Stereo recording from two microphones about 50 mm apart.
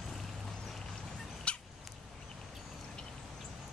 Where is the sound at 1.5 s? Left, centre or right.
Left.